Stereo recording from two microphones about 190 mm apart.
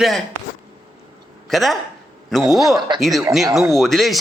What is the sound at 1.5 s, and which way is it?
A man's voice, centre (ahead or behind).